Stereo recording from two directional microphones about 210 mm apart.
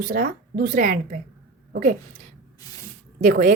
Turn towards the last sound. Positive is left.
turn(degrees=-40)  # may be behind; listen again after turning